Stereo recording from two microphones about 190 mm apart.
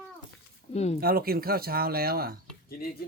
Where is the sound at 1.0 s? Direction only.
55° right (ahead or behind).